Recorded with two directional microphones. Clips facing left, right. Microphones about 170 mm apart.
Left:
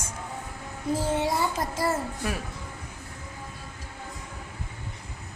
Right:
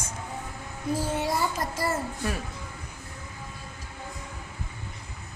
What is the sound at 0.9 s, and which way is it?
Child singing, 25° left (ahead or behind).